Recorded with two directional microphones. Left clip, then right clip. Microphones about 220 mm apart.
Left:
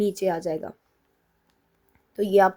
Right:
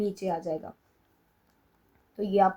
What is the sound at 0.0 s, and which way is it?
Speech, 45° left (ahead or behind).